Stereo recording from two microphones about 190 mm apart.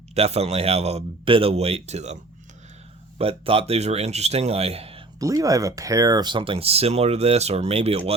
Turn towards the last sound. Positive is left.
turn(degrees=-30)  # may be behind; listen again after turning